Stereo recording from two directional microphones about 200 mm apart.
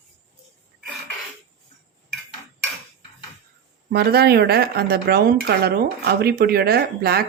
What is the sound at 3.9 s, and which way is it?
Speech, 55° right (ahead or behind).